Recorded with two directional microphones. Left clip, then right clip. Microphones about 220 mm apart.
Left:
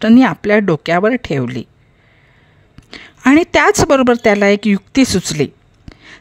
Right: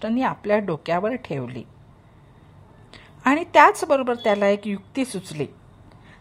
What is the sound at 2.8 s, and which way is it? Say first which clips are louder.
A woman's voice: left 7 dB; 40° left (ahead or behind).